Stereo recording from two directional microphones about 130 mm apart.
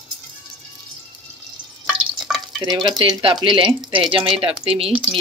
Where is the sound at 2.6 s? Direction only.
35° right (ahead or behind).